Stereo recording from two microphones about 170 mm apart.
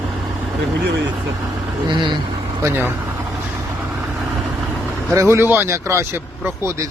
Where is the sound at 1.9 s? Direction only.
25° right (ahead or behind).